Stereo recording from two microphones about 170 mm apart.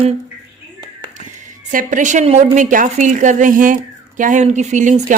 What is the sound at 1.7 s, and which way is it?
Speech, 50° right (ahead or behind).